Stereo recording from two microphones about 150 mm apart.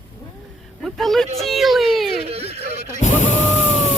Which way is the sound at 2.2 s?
45° right (ahead or behind).